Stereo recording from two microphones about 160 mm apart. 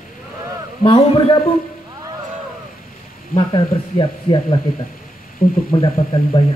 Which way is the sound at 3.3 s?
30° left (ahead or behind).